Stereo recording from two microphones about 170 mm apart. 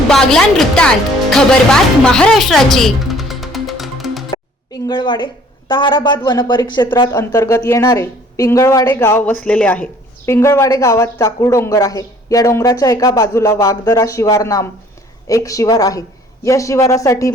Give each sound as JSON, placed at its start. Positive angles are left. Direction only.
{"t": 0.1, "sound": "speech", "side_deg": 0}
{"t": 4.3, "sound": "a woman's voice", "side_deg": 25}